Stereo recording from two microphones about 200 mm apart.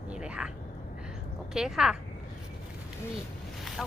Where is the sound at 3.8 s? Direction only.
Centre (ahead or behind).